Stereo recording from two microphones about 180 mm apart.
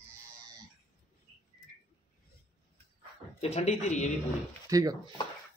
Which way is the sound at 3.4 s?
40° left (ahead or behind).